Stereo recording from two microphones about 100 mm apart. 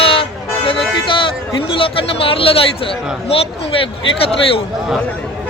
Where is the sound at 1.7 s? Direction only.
60° left (ahead or behind).